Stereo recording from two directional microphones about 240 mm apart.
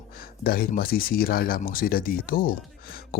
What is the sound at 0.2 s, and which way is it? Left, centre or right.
Speech, left.